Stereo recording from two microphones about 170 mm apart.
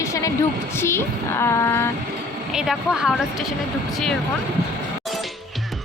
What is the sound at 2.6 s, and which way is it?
Speech, 5° right (ahead or behind).